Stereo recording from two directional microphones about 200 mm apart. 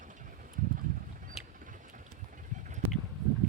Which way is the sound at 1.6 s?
40° right (ahead or behind).